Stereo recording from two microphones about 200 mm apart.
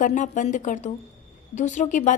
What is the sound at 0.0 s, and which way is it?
A woman's voice, 40° left (ahead or behind).